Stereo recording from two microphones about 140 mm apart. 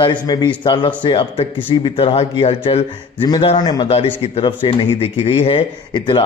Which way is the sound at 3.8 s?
45° left (ahead or behind).